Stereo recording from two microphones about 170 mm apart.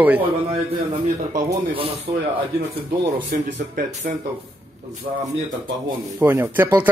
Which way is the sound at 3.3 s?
60° right (ahead or behind).